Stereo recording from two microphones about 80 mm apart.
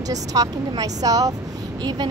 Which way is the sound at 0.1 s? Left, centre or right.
Right.